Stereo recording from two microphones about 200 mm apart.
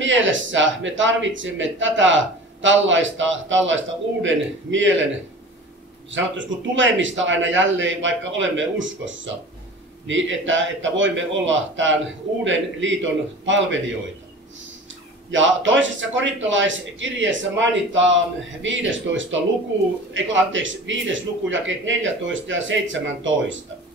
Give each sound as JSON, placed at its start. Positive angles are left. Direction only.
{"t": 0.0, "sound": "speech", "side_deg": -70}
{"t": 6.1, "sound": "speech", "side_deg": -70}
{"t": 15.3, "sound": "speech", "side_deg": -70}